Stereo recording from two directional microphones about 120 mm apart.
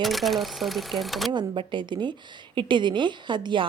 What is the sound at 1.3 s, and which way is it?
A woman's voice, 40° right (ahead or behind).